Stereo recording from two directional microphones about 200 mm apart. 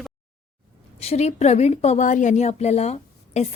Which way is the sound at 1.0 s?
30° left (ahead or behind).